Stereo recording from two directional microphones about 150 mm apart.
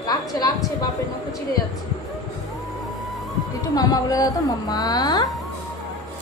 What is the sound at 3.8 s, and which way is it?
A woman's voice, 25° left (ahead or behind).